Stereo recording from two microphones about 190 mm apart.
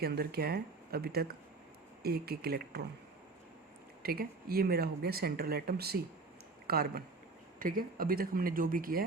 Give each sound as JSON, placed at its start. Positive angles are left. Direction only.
{"t": 0.0, "sound": "speech", "side_deg": -55}
{"t": 4.0, "sound": "speech", "side_deg": -50}